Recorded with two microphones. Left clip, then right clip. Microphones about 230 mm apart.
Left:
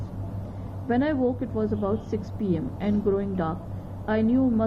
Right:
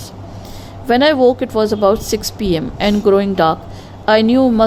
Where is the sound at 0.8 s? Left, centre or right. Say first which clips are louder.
Right 14 dB; right.